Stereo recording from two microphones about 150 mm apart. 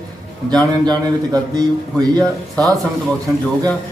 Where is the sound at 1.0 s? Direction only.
25° right (ahead or behind).